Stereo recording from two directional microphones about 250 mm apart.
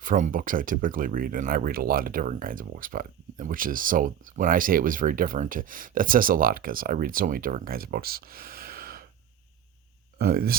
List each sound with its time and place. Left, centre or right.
0.0 s speech: right
10.2 s speech: right